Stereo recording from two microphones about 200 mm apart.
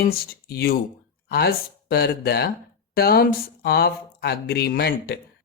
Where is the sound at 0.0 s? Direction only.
50° left (ahead or behind).